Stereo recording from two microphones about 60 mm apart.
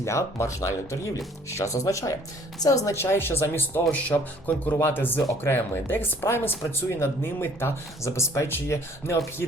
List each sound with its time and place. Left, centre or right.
0.0 s speech: left
2.6 s a woman's voice: left
2.9 s speech: left
4.1 s speech: left
4.8 s speech: left